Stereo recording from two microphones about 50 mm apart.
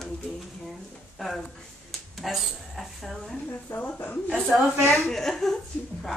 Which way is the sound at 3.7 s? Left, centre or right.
Left.